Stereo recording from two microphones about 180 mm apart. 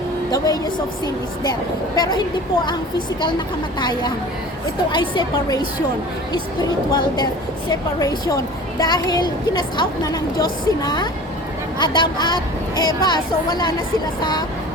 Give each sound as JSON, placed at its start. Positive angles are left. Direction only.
{"t": 0.3, "sound": "a woman's voice", "side_deg": 20}